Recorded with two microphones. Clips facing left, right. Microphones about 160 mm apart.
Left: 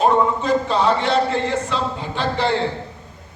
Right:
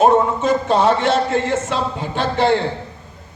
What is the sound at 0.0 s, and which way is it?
A man's voice, 45° right (ahead or behind).